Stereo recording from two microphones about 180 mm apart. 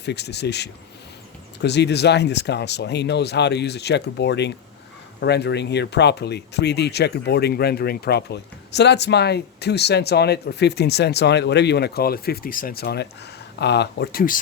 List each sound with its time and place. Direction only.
0.0 s speech: 70° left (ahead or behind)